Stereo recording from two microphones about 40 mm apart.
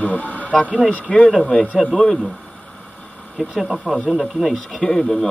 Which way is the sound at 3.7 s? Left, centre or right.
Centre.